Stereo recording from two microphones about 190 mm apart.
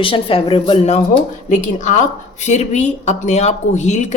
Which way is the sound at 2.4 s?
40° left (ahead or behind).